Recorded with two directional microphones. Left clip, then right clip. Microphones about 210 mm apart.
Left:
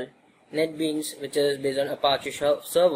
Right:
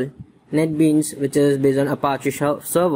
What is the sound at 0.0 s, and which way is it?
Speech, 25° right (ahead or behind).